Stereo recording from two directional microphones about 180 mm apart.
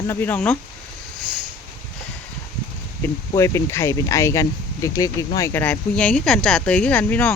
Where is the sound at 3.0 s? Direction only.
15° left (ahead or behind).